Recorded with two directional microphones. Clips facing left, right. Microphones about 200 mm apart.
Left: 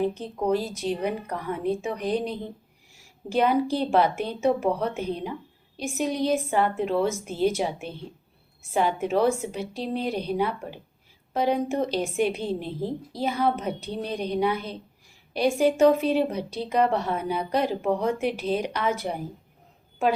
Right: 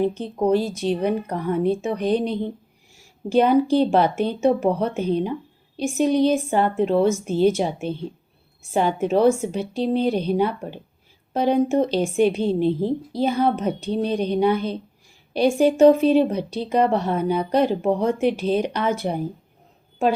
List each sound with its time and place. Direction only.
0.1 s speech: 25° right (ahead or behind)
3.2 s speech: 25° right (ahead or behind)